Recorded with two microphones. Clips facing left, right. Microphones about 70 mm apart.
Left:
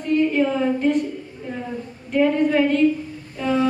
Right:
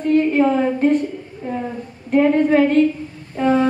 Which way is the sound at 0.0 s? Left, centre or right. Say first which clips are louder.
Right 4 dB; right.